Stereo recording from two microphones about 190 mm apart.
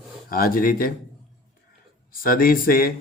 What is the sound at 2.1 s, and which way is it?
Speech, 50° left (ahead or behind).